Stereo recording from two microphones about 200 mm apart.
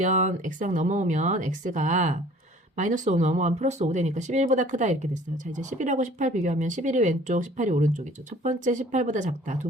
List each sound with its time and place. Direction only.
0.0 s speech: 40° right (ahead or behind)